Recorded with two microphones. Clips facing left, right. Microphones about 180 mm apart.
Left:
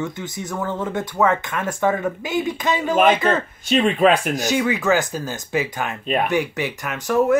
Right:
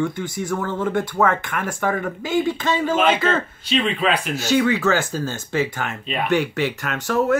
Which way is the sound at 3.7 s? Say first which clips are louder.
Left 5 dB; 45° left (ahead or behind).